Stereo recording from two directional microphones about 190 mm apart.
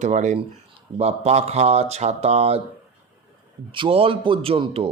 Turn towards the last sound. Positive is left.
turn(degrees=-30)  # may be behind; listen again after turning